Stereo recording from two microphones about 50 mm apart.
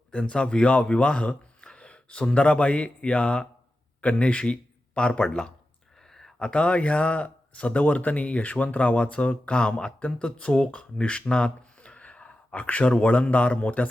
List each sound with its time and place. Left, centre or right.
0.1 s speech: centre
6.1 s a sound: centre
6.5 s speech: left